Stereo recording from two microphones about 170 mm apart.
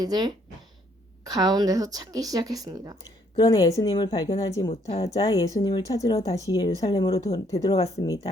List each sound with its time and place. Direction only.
0.0 s speech: 25° right (ahead or behind)
3.3 s speech: 20° left (ahead or behind)
4.7 s speech: 35° left (ahead or behind)
5.1 s speech: 20° left (ahead or behind)
7.4 s speech: 20° left (ahead or behind)